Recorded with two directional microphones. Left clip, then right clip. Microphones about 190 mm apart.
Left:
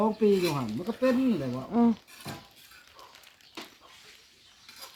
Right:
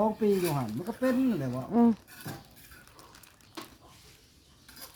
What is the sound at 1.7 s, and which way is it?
Speech, 40° right (ahead or behind).